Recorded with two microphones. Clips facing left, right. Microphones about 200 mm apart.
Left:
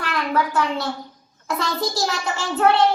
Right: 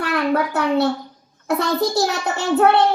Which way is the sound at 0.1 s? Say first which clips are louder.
Right 2 dB; 60° right (ahead or behind).